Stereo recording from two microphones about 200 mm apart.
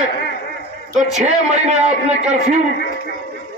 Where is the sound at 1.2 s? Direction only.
35° right (ahead or behind).